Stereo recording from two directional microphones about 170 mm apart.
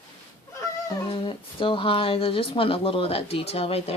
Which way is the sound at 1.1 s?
30° left (ahead or behind).